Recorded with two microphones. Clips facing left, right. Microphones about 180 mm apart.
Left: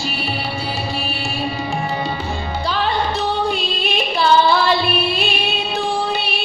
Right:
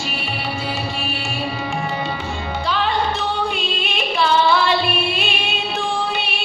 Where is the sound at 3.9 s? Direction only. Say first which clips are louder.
Left 3 dB; 35° left (ahead or behind).